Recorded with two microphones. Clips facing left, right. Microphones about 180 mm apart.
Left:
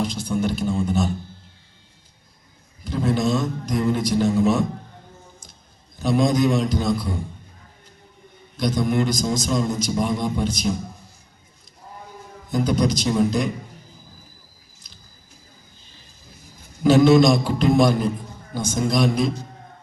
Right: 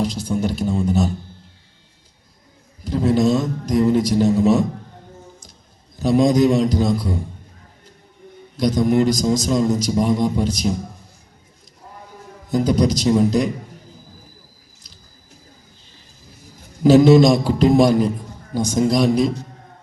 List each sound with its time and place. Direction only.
0.0 s a sound: 40° right (ahead or behind)
2.8 s a sound: 35° right (ahead or behind)
6.0 s a man's voice: 35° right (ahead or behind)
8.5 s a man's voice: 40° right (ahead or behind)
12.5 s a man's voice: 35° right (ahead or behind)
14.8 s squish: 35° right (ahead or behind)
16.8 s a man's voice: 35° right (ahead or behind)